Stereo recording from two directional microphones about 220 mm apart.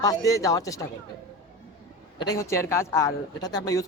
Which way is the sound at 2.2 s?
15° left (ahead or behind).